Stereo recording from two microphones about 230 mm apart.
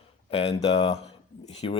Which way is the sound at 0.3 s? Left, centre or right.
Left.